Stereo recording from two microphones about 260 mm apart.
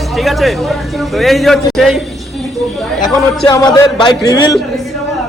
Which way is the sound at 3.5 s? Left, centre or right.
Centre.